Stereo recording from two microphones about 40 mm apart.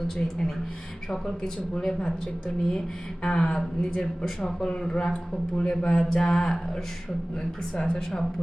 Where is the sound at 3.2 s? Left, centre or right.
Left.